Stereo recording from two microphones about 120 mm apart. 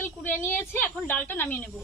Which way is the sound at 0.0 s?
15° left (ahead or behind).